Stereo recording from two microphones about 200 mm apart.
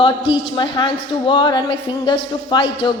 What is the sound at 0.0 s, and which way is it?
A man's voice, 25° left (ahead or behind).